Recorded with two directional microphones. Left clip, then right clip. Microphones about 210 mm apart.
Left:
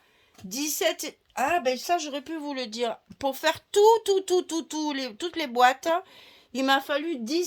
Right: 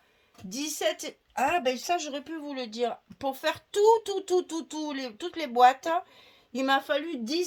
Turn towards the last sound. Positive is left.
turn(degrees=30)  # may be behind; listen again after turning